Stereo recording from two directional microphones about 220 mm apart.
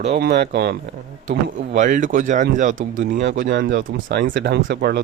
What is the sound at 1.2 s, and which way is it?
Speech, 35° right (ahead or behind).